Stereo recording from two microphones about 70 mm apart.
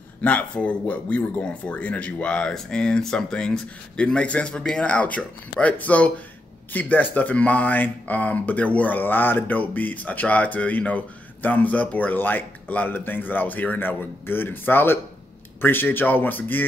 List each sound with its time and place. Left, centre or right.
0.2 s speech: centre